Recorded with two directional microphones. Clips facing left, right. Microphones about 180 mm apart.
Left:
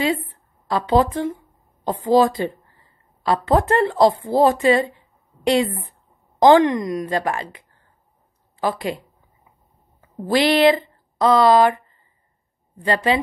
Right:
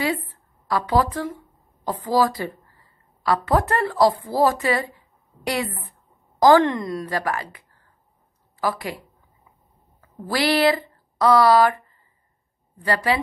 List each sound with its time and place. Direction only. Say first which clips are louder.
0.0 s a woman's voice: left 3 dB; 25° left (ahead or behind)